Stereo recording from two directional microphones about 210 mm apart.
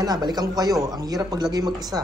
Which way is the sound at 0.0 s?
20° right (ahead or behind).